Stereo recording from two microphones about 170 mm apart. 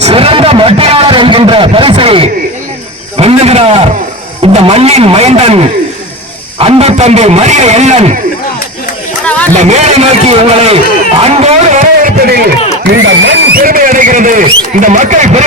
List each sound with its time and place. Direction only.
0.0 s a sound: 35° right (ahead or behind)
3.2 s speech: 35° right (ahead or behind)
9.2 s a sound: 10° left (ahead or behind)
9.6 s speech: 40° right (ahead or behind)
12.2 s speech: 65° right (ahead or behind)
12.8 s speech: 85° right
13.6 s speech: 55° right (ahead or behind)